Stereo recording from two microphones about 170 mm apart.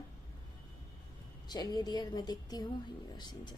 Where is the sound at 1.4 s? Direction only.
25° left (ahead or behind).